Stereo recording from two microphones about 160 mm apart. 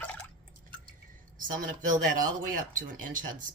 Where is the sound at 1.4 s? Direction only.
55° right (ahead or behind).